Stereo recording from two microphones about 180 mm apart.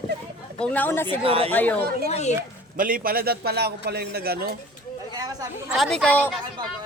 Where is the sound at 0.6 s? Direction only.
10° left (ahead or behind).